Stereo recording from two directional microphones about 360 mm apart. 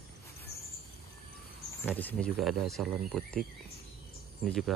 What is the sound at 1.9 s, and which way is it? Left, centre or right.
Speech, centre.